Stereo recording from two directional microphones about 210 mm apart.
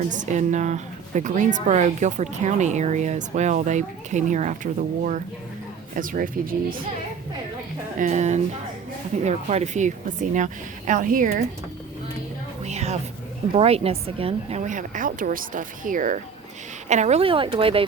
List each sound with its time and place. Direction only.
0.1 s a woman's voice: 35° right (ahead or behind)
7.9 s a woman's voice: 35° right (ahead or behind)
12.6 s music: 30° right (ahead or behind)
13.5 s a woman's voice: 30° right (ahead or behind)